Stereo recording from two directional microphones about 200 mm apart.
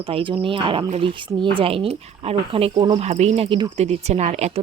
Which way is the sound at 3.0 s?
35° right (ahead or behind).